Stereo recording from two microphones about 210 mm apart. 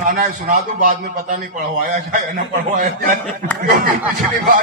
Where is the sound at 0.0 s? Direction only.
40° right (ahead or behind).